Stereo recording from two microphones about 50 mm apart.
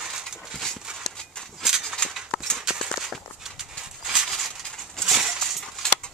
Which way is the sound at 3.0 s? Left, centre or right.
Centre.